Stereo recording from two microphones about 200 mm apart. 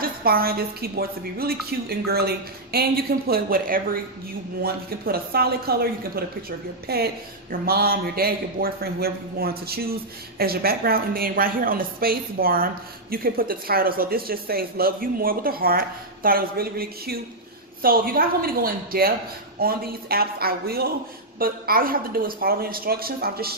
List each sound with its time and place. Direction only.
0.0 s a man's voice: 50° right (ahead or behind)